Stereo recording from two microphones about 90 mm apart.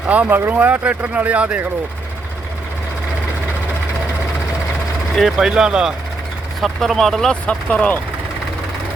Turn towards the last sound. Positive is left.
turn(degrees=15)  # may be behind; listen again after turning